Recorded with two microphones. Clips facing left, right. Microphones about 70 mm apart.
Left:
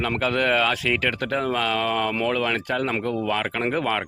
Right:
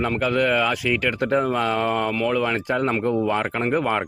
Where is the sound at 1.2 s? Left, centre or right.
Right.